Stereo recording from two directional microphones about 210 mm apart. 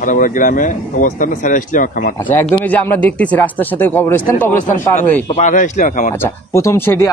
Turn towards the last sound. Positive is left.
turn(degrees=10)  # may be behind; listen again after turning